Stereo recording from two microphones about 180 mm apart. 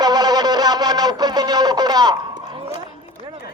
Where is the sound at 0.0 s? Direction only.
20° right (ahead or behind).